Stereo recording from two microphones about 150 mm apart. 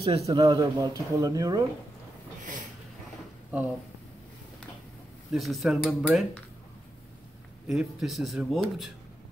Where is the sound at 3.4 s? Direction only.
10° right (ahead or behind).